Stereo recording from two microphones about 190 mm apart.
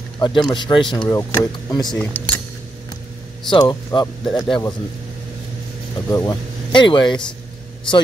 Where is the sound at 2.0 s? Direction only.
5° left (ahead or behind).